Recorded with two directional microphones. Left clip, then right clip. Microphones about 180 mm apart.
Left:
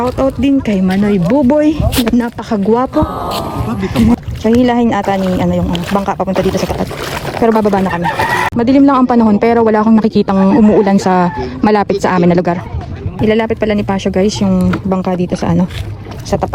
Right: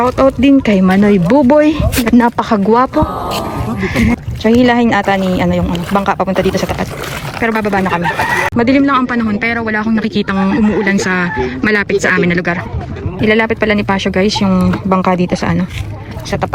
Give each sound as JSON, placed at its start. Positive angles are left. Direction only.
{"t": 0.6, "sound": "speech", "side_deg": 5}
{"t": 1.6, "sound": "speech", "side_deg": 15}
{"t": 2.0, "sound": "speech", "side_deg": 0}
{"t": 5.0, "sound": "speech", "side_deg": 0}
{"t": 5.5, "sound": "speech", "side_deg": 15}
{"t": 8.0, "sound": "speech", "side_deg": 55}
{"t": 8.5, "sound": "speech", "side_deg": 15}
{"t": 9.6, "sound": "speech", "side_deg": -70}
{"t": 10.2, "sound": "speech", "side_deg": 25}
{"t": 13.2, "sound": "speech", "side_deg": 10}
{"t": 14.6, "sound": "speech", "side_deg": 0}
{"t": 14.9, "sound": "speech", "side_deg": 10}